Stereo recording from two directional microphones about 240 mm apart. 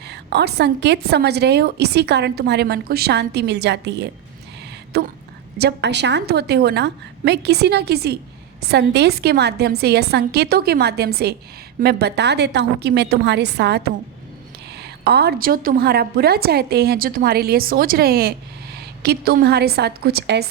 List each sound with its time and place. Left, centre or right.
0.0 s a woman's voice: right